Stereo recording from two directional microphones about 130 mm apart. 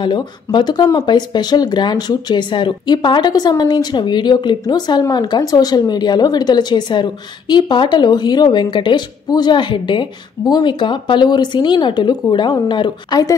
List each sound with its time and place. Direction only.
0.0 s speech: 35° left (ahead or behind)